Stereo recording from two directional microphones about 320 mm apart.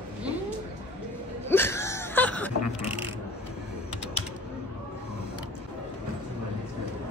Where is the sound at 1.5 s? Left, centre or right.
Centre.